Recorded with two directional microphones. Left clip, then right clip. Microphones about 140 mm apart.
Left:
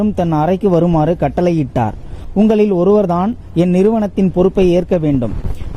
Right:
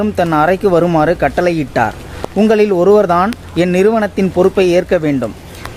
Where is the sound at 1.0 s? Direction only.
50° left (ahead or behind).